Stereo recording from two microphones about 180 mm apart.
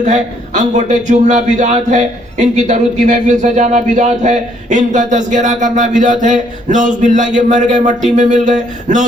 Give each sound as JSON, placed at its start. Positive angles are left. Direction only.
{"t": 0.0, "sound": "a man's voice", "side_deg": -40}